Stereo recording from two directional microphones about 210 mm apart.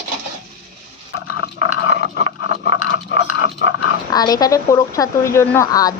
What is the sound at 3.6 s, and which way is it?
Dog, 55° left (ahead or behind).